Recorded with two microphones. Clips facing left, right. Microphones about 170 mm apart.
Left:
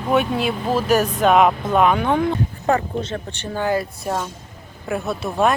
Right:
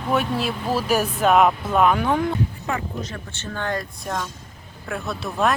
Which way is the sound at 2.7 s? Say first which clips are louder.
Left 11 dB; 35° left (ahead or behind).